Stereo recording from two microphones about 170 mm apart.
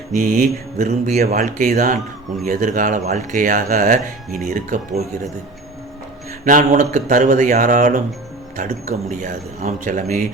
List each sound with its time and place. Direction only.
0.1 s speech: 50° right (ahead or behind)
6.4 s speech: 50° right (ahead or behind)